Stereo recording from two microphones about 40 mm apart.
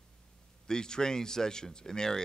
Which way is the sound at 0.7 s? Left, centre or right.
Centre.